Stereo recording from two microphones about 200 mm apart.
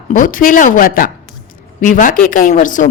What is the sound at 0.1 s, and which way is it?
A woman's voice, 40° left (ahead or behind).